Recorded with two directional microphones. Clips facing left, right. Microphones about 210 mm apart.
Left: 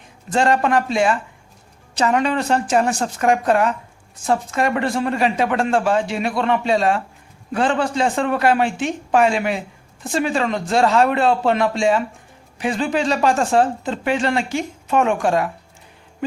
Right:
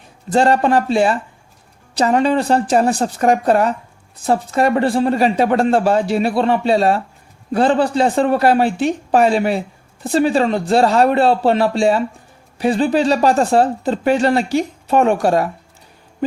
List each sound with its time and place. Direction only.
0.3 s speech: 35° right (ahead or behind)